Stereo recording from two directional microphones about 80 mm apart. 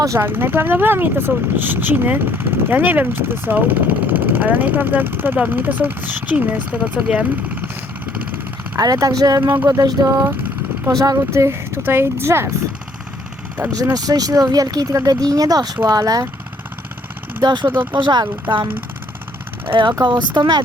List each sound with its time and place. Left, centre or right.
0.2 s speech: right
8.7 s speech: right
11.3 s speech: right
13.6 s speech: right
13.9 s speech: right
17.4 s speech: right
17.7 s speech: right
18.0 s speech: right
19.6 s speech: right
20.1 s speech: right